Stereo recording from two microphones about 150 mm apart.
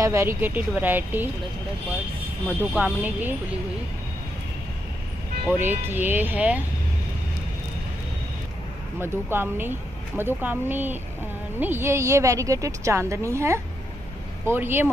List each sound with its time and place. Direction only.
0.0 s speech: 20° right (ahead or behind)
2.7 s speech: 10° right (ahead or behind)
5.5 s speech: 15° right (ahead or behind)
9.0 s a woman's voice: 15° right (ahead or behind)